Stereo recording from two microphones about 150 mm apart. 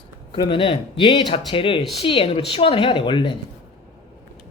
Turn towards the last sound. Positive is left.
turn(degrees=35)  # may be behind; listen again after turning